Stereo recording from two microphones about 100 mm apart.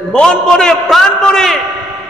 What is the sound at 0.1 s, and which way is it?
A man's voice, 10° left (ahead or behind).